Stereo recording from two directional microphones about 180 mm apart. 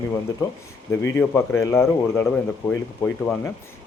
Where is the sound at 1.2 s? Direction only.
10° left (ahead or behind).